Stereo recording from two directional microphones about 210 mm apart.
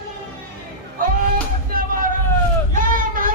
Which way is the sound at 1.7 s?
40° right (ahead or behind).